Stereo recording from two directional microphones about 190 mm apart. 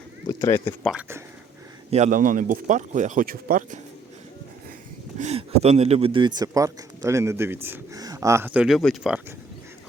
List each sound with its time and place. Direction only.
0.3 s speech: 15° left (ahead or behind)
0.9 s speech: 5° right (ahead or behind)
1.9 s speech: 40° right (ahead or behind)
5.2 s speech: 30° right (ahead or behind); by 9.2 s centre (ahead or behind)